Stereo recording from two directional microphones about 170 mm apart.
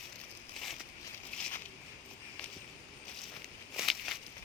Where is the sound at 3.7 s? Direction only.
Centre (ahead or behind).